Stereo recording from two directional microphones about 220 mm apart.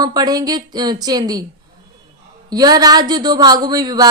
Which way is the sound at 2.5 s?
20° right (ahead or behind).